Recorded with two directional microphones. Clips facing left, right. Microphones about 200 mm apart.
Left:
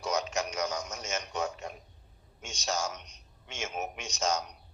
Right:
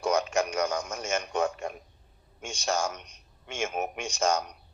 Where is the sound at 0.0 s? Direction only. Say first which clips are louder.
Right 5 dB; 55° right (ahead or behind).